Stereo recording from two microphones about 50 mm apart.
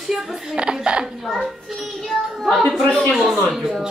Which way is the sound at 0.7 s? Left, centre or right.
Centre.